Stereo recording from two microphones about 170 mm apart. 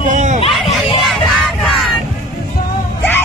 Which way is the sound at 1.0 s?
Centre (ahead or behind).